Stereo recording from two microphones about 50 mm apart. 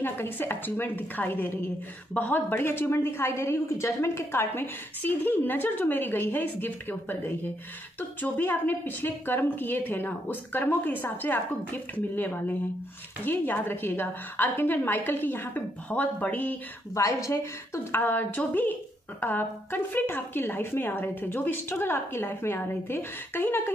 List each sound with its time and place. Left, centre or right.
0.0 s a woman's voice: left
5.0 s a woman's voice: left
16.9 s speech: left
17.9 s a woman's voice: left
18.3 s a woman's voice: left